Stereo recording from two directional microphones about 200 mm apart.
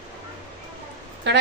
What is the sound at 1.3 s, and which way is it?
Speech, 60° right (ahead or behind).